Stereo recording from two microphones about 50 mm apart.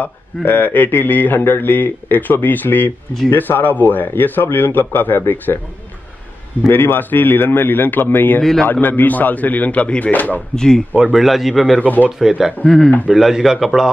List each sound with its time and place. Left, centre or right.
0.5 s a man's voice: left
6.7 s a man's voice: left
8.4 s speech: centre
8.8 s a man's voice: left
10.1 s a man's voice: left
10.5 s speech: centre
11.1 s a man's voice: centre
11.8 s a man's voice: left
12.2 s speech: centre
12.6 s speech: centre
13.2 s a man's voice: centre